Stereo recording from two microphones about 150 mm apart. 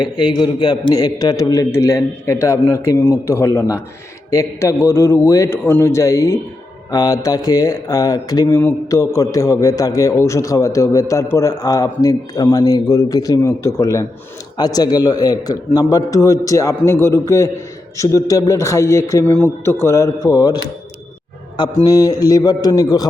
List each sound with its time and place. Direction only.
0.0 s speech: 30° left (ahead or behind)
21.8 s speech: 25° left (ahead or behind)